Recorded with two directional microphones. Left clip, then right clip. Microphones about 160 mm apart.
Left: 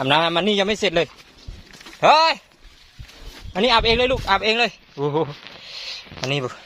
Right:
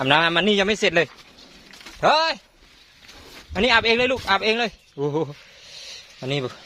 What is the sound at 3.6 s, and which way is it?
Speech, 20° left (ahead or behind).